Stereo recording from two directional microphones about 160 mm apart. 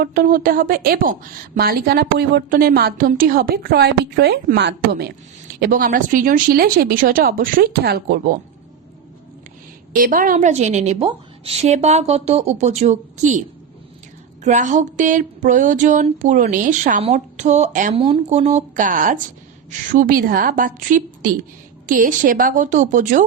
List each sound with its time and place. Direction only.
0.0 s a woman's voice: 65° right (ahead or behind); by 5.1 s 90° right
5.5 s speech: 60° right (ahead or behind)
9.9 s a woman's voice: 60° right (ahead or behind)
14.4 s a woman's voice: 50° right (ahead or behind)
17.0 s a woman's voice: 45° right (ahead or behind)
17.9 s a woman's voice: 35° right (ahead or behind); by 23.2 s 55° right (ahead or behind)